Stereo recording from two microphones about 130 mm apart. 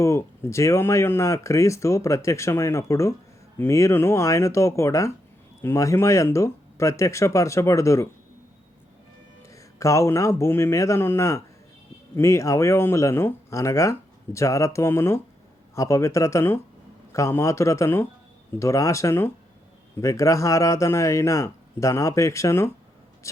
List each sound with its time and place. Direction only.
0.0 s speech: 20° left (ahead or behind)
9.5 s speech: 25° left (ahead or behind)